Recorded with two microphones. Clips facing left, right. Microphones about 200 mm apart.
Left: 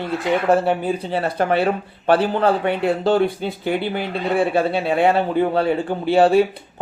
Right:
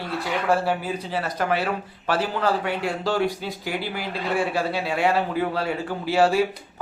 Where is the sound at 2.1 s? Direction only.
55° left (ahead or behind).